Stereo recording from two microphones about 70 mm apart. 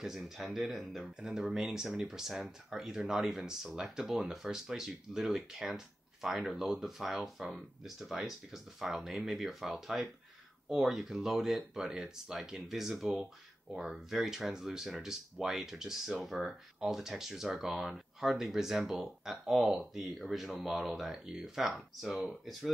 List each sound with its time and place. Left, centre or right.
0.0 s speech: centre